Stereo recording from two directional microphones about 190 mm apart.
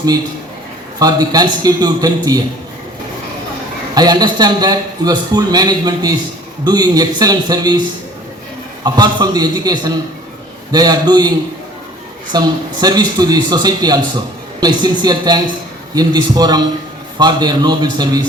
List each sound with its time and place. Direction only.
0.9 s a man's voice: 20° right (ahead or behind)
3.9 s a man's voice: 20° right (ahead or behind)
8.8 s a man's voice: 20° right (ahead or behind)